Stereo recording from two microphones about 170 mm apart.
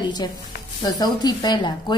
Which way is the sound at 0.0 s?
25° left (ahead or behind).